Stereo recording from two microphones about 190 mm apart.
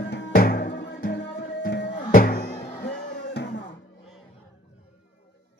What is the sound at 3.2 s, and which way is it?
Music, 70° left (ahead or behind).